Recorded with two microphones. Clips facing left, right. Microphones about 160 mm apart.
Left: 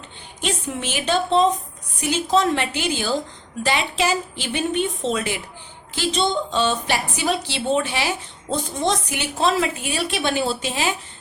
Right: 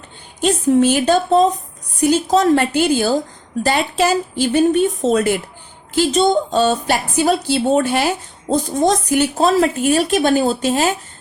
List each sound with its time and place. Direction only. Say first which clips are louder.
0.4 s a woman's voice: right 13 dB; 40° right (ahead or behind)